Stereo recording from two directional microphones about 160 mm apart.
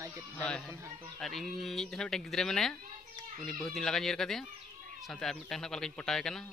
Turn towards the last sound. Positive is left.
turn(degrees=5)  # may be behind; listen again after turning